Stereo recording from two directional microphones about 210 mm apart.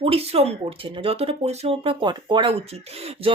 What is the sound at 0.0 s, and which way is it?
Speech, 30° right (ahead or behind).